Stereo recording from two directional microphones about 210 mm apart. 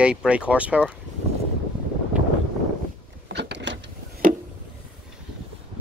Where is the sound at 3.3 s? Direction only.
55° right (ahead or behind).